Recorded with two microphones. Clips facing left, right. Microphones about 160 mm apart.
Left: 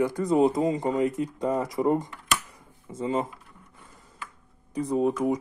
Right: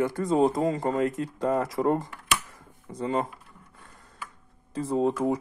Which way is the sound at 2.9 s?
Centre (ahead or behind).